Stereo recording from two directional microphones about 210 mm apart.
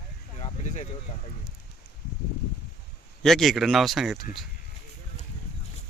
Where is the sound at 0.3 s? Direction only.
30° left (ahead or behind).